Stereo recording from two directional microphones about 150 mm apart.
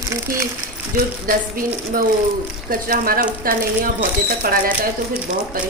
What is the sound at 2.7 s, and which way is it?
Speech, 70° right (ahead or behind).